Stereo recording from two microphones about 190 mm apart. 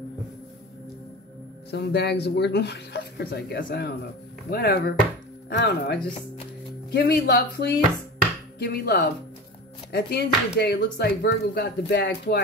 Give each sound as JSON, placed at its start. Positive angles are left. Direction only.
{"t": 1.7, "sound": "speech", "side_deg": 60}